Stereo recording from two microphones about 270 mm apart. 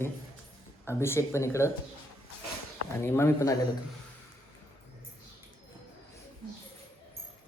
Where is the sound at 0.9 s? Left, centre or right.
Centre.